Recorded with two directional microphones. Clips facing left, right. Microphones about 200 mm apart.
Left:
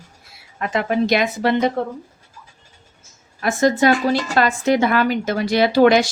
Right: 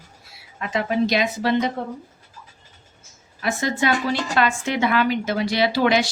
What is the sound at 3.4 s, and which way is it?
A woman's voice, 45° left (ahead or behind).